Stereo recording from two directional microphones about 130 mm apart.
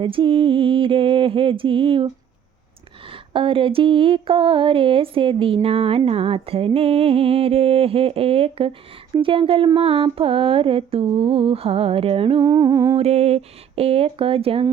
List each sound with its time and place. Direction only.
0.0 s music: 40° right (ahead or behind)
12.4 s humming: 25° right (ahead or behind)
13.0 s music: 55° right (ahead or behind)